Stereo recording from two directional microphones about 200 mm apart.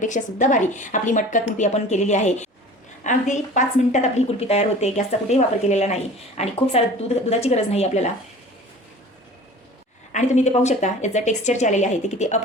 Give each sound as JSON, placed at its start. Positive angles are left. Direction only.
{"t": 0.0, "sound": "a woman's voice", "side_deg": 40}
{"t": 10.1, "sound": "a woman's voice", "side_deg": 35}